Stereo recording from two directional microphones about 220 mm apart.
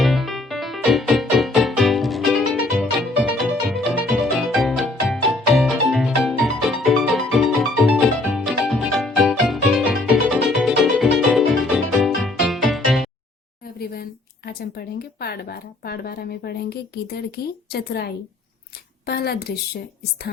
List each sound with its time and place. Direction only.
0.0 s music: centre (ahead or behind)
13.7 s a woman's voice: 45° left (ahead or behind)